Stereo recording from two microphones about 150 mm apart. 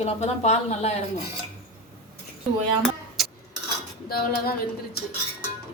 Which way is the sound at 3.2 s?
Centre (ahead or behind).